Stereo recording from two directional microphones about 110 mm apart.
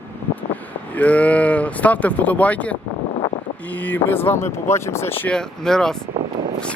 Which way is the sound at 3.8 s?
15° left (ahead or behind).